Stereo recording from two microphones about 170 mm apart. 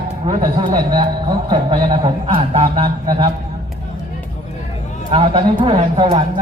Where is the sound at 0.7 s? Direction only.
25° right (ahead or behind).